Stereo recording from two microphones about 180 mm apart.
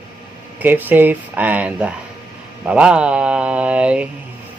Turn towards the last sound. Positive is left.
turn(degrees=-5)  # may be behind; listen again after turning